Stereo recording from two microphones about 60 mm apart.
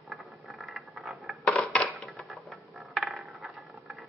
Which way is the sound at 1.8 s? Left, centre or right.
Centre.